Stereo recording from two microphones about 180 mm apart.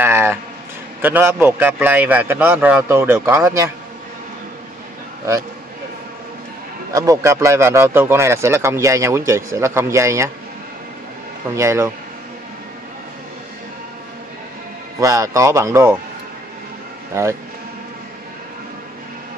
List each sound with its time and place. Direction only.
0.0 s music: 10° right (ahead or behind)
1.0 s speech: 10° right (ahead or behind)
6.9 s speech: 20° right (ahead or behind)
11.5 s speech: 15° right (ahead or behind)
15.0 s speech: 20° right (ahead or behind)
17.1 s speech: 15° right (ahead or behind)